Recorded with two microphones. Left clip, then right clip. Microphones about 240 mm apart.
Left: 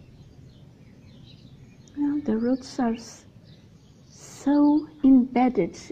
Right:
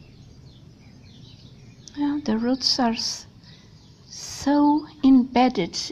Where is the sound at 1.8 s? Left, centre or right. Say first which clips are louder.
Right 1 dB; centre.